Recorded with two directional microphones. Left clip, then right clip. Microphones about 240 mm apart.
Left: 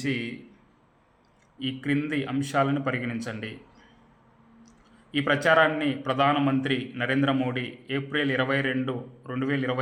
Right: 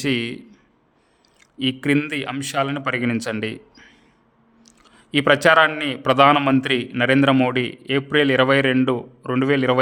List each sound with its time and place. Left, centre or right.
0.0 s a man's voice: right
1.5 s a man's voice: right